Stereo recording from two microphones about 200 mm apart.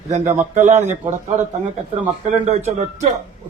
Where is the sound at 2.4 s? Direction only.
35° right (ahead or behind).